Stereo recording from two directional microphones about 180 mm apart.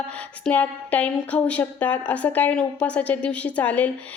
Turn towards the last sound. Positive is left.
turn(degrees=10)  # may be behind; listen again after turning